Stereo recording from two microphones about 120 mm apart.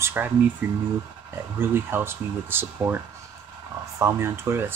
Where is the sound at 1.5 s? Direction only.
20° right (ahead or behind).